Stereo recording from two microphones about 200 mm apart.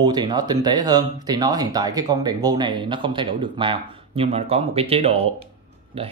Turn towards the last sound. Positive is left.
turn(degrees=-30)  # may be behind; listen again after turning